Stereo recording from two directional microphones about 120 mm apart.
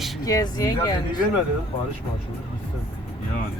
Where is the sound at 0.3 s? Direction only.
30° left (ahead or behind).